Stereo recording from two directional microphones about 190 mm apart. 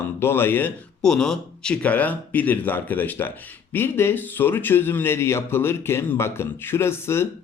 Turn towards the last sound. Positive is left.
turn(degrees=15)  # may be behind; listen again after turning